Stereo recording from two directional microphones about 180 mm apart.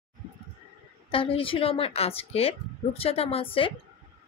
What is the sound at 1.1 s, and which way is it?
Speech, 30° left (ahead or behind).